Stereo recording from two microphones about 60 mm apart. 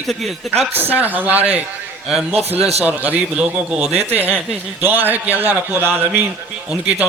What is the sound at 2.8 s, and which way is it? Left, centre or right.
A man's voice, right.